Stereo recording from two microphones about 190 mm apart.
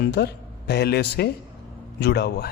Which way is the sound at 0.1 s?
60° left (ahead or behind).